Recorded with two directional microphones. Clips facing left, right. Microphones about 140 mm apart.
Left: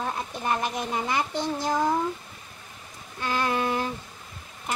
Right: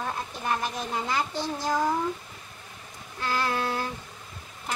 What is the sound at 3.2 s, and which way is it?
Music, 20° left (ahead or behind).